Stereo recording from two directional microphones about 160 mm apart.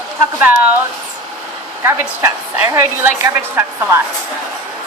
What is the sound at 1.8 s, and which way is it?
A woman's voice, 15° right (ahead or behind).